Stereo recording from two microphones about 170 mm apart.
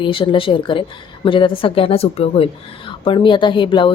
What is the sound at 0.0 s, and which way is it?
A woman's voice, 30° left (ahead or behind).